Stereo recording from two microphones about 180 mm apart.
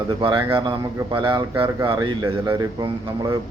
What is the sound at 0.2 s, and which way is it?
Speech, 25° right (ahead or behind).